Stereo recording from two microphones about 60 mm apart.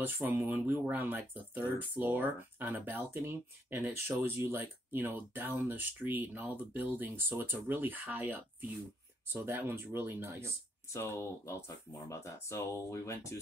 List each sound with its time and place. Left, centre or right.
0.2 s speech: right
10.9 s speech: left